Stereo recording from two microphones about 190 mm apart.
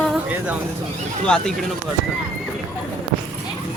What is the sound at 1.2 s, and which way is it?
Female singing, 5° left (ahead or behind).